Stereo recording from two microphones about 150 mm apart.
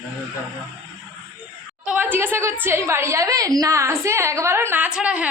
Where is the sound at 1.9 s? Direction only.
10° right (ahead or behind).